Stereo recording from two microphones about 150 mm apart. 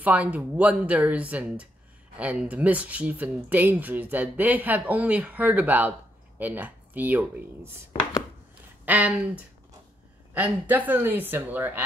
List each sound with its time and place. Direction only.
0.0 s speech: 10° right (ahead or behind)
8.8 s speech: 10° right (ahead or behind)